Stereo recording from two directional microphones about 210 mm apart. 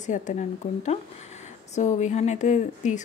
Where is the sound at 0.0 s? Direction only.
35° left (ahead or behind).